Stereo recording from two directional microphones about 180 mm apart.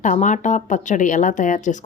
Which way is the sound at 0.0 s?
45° left (ahead or behind).